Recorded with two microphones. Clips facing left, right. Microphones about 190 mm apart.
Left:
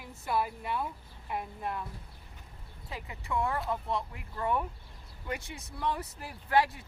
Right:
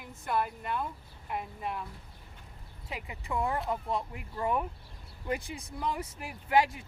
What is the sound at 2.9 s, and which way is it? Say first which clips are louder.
Speech: even; 15° right (ahead or behind).